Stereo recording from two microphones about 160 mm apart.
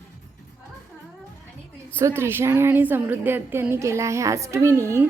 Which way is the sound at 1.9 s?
15° right (ahead or behind).